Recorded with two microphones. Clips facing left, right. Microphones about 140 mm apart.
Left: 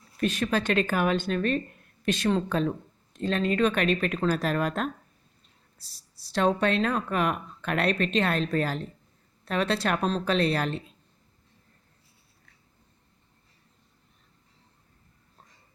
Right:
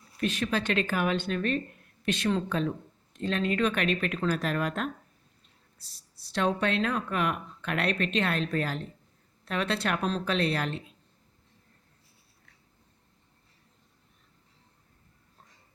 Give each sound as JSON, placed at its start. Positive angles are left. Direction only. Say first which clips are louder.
{"t": 0.2, "sound": "a woman's voice", "louder": "left 3 dB", "side_deg": 45}